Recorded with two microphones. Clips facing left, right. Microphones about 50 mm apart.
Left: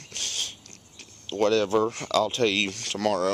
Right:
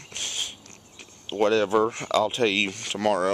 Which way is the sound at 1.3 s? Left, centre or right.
Centre.